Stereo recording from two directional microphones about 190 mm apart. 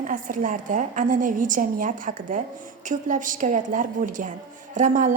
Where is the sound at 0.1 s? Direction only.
45° right (ahead or behind).